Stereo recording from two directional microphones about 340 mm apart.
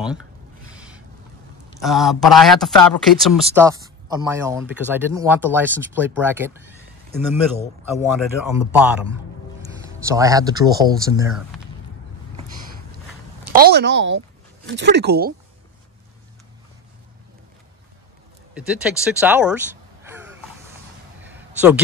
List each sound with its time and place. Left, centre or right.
0.7 s a sound: centre
1.8 s speech: centre
9.8 s speech: centre
13.5 s a woman's voice: right
18.5 s speech: centre
21.2 s a sound: centre